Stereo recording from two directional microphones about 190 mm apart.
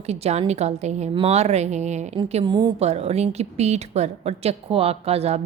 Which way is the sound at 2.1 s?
25° right (ahead or behind).